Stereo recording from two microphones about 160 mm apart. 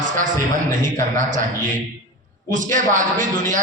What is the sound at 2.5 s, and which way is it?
A man's voice, 55° right (ahead or behind).